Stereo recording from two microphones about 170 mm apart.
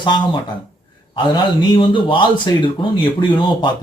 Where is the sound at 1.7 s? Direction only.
30° left (ahead or behind).